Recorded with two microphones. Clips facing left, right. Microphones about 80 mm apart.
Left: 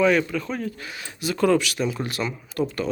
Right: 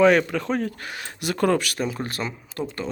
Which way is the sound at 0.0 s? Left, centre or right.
Right.